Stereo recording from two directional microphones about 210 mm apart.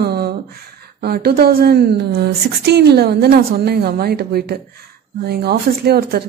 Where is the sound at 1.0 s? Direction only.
50° right (ahead or behind).